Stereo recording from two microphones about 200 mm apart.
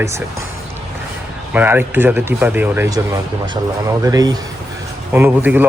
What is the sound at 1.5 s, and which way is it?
Speech, 10° right (ahead or behind).